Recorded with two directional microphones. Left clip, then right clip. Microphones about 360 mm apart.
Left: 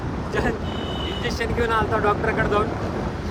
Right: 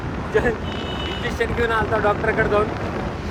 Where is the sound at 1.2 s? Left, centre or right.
Centre.